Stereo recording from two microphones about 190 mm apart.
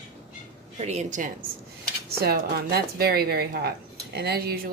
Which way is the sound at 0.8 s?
35° right (ahead or behind).